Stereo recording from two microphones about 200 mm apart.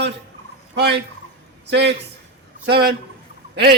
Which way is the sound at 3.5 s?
55° right (ahead or behind).